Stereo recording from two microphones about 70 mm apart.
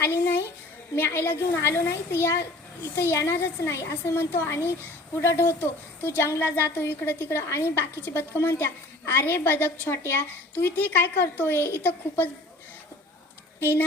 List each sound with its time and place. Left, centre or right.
0.0 s a woman's voice: left
13.6 s a woman's voice: left